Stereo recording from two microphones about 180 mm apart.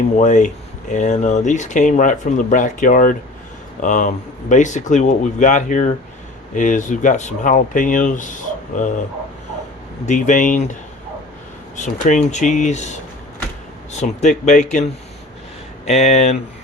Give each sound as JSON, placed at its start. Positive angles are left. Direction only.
{"t": 0.2, "sound": "speech", "side_deg": 45}
{"t": 10.1, "sound": "speech", "side_deg": 45}
{"t": 11.8, "sound": "speech", "side_deg": 40}
{"t": 13.9, "sound": "speech", "side_deg": 40}
{"t": 15.9, "sound": "speech", "side_deg": 40}